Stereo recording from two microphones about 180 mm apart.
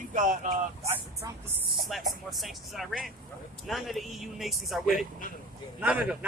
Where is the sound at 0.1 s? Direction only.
45° right (ahead or behind).